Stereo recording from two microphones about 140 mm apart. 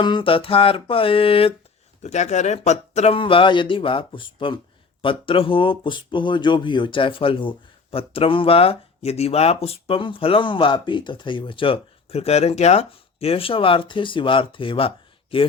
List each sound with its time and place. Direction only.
0.0 s speech: 35° left (ahead or behind)
2.0 s speech: 55° left (ahead or behind); by 15.4 s 40° left (ahead or behind)